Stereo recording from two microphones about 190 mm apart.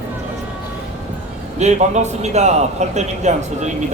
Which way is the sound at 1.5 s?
35° right (ahead or behind).